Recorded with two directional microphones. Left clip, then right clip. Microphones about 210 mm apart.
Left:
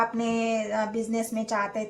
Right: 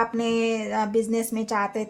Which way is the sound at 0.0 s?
45° right (ahead or behind).